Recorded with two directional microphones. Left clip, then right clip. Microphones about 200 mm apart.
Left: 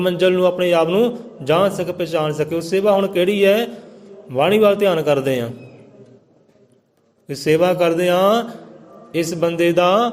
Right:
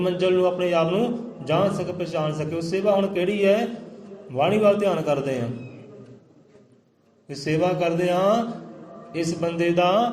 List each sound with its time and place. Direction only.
0.0 s a man's voice: 50° left (ahead or behind)
7.3 s a man's voice: 50° left (ahead or behind)